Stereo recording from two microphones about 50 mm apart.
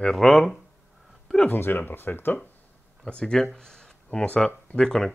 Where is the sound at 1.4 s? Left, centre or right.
Left.